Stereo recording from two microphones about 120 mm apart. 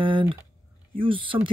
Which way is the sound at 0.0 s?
45° right (ahead or behind).